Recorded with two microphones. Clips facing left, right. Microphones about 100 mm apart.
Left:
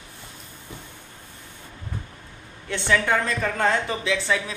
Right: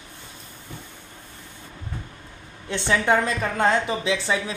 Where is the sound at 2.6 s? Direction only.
20° right (ahead or behind).